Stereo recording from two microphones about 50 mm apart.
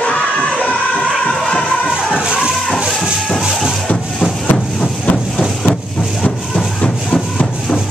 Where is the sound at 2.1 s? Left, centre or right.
Right.